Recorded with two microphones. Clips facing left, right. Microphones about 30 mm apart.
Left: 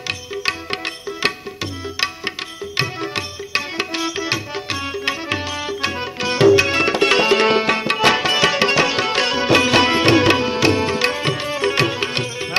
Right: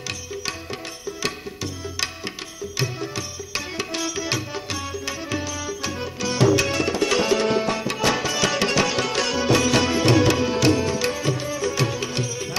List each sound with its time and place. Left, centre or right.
1.2 s music: left
3.9 s music: left
7.4 s music: left
8.5 s music: left